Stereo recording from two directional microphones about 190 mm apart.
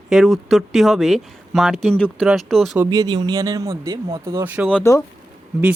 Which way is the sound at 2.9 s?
20° right (ahead or behind).